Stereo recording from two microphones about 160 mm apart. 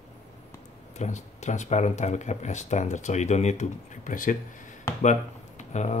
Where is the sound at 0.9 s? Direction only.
45° left (ahead or behind).